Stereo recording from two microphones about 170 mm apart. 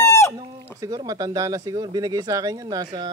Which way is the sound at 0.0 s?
15° left (ahead or behind).